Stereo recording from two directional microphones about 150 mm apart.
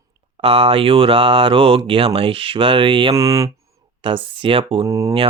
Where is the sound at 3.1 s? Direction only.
20° right (ahead or behind).